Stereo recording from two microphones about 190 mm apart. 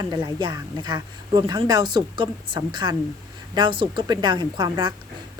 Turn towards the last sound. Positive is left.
turn(degrees=-20)  # may be behind; listen again after turning